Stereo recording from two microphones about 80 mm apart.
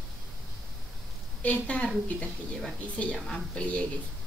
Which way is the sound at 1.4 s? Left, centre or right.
Centre.